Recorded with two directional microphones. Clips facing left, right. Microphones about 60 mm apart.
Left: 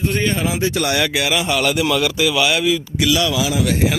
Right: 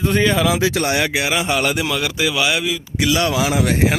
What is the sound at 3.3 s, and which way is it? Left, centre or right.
Speech, right.